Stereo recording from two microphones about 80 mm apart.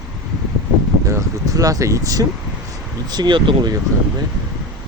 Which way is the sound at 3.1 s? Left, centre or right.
Right.